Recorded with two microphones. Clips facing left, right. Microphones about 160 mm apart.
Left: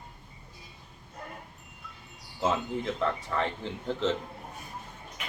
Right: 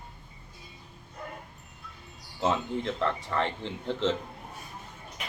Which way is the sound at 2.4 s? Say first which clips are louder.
Right 1 dB; 5° left (ahead or behind).